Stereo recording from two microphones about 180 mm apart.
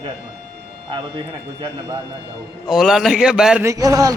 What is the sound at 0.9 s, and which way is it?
Speech, 25° right (ahead or behind).